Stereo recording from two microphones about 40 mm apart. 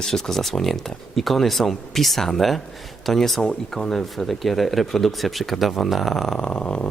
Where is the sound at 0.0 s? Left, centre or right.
Centre.